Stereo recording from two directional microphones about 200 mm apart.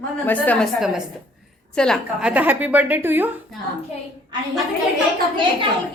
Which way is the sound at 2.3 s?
10° right (ahead or behind).